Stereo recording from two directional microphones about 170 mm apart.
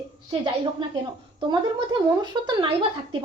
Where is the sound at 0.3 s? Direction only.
30° right (ahead or behind).